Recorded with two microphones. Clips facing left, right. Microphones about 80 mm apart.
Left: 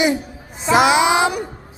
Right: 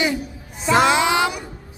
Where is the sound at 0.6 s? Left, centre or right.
Centre.